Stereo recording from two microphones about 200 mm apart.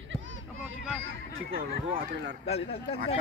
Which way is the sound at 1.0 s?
80° right.